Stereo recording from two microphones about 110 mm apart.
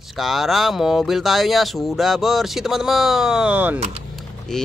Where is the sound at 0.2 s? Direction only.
Centre (ahead or behind).